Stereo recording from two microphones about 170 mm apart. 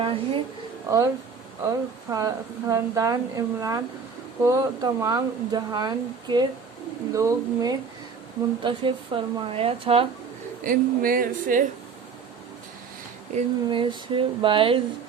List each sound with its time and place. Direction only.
0.0 s a woman's voice: 30° right (ahead or behind)
0.9 s a woman's voice: 20° right (ahead or behind)
10.6 s speech: 55° right (ahead or behind)
13.7 s a woman's voice: 30° right (ahead or behind)